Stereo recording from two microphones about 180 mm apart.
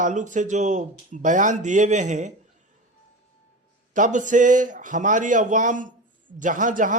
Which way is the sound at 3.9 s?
45° right (ahead or behind).